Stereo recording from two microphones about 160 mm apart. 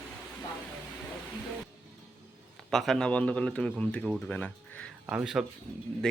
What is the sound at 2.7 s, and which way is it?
Speech, centre (ahead or behind).